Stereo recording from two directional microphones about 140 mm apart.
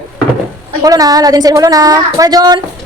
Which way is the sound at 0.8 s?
25° right (ahead or behind).